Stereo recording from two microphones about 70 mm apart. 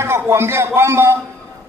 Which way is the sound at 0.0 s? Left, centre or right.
Right.